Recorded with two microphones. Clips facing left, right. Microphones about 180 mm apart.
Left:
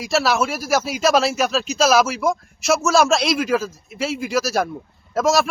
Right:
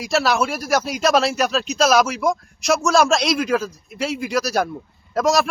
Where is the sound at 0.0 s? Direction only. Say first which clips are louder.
Even; centre (ahead or behind).